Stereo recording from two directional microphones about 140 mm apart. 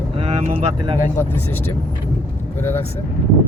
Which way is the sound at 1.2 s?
15° left (ahead or behind).